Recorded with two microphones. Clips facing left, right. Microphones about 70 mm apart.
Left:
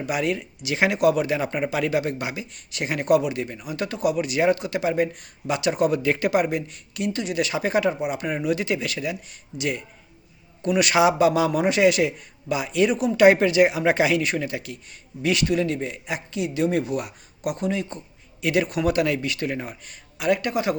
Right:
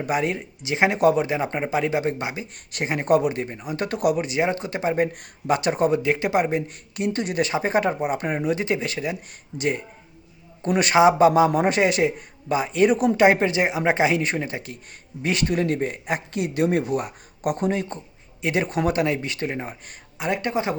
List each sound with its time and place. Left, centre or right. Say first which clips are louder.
0.0 s a man's voice: right 1 dB; right
3.9 s speech: right 2 dB; right
4.2 s a man's voice: left 2 dB; right
6.0 s speech: even; right
6.7 s a man's voice: right 2 dB; right
13.1 s a man's voice: left 2 dB; right